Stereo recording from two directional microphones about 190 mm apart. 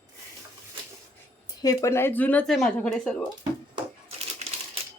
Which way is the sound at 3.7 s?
30° right (ahead or behind).